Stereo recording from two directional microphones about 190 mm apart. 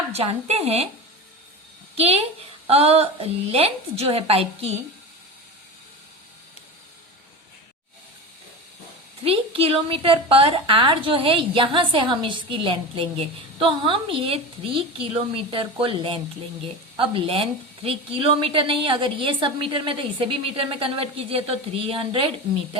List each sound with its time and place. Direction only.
0.1 s a woman's voice: 35° right (ahead or behind)
2.0 s a woman's voice: 30° right (ahead or behind)
9.2 s a woman's voice: 30° right (ahead or behind)